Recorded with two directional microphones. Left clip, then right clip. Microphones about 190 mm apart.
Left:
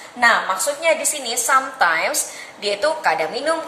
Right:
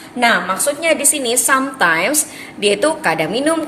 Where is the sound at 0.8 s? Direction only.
50° right (ahead or behind).